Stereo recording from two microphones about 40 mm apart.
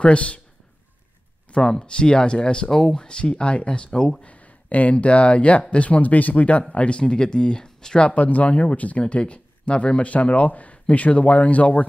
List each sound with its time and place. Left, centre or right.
0.0 s speech: left
1.5 s speech: centre
2.7 s speech: centre
3.0 s speech: left
4.2 s speech: left
8.1 s speech: left
9.0 s speech: left